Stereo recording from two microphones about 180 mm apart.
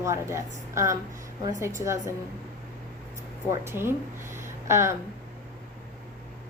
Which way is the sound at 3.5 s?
15° right (ahead or behind).